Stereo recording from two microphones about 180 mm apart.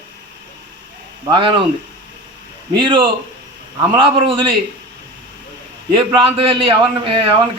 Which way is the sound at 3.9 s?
25° right (ahead or behind).